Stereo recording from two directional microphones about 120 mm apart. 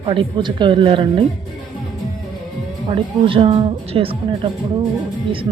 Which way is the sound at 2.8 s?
50° right (ahead or behind).